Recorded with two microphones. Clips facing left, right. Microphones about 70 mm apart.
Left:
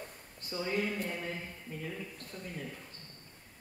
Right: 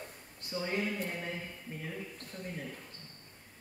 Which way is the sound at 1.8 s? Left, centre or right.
Right.